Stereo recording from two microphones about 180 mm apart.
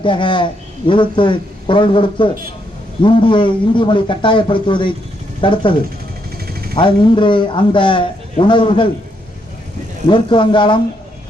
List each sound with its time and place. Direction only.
0.0 s a man's voice: 25° left (ahead or behind)
6.7 s a man's voice: 25° left (ahead or behind)
10.1 s a man's voice: 30° left (ahead or behind)